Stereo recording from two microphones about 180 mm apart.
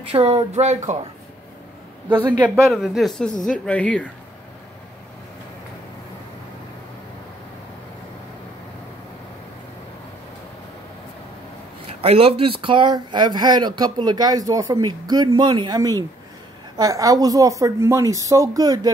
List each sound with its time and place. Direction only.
0.1 s speech: 35° right (ahead or behind)
2.1 s a man's voice: 15° right (ahead or behind)
2.5 s speech: centre (ahead or behind)
12.0 s speech: 30° right (ahead or behind)